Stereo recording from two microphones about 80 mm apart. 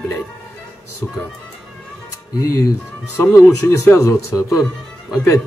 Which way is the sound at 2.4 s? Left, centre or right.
Left.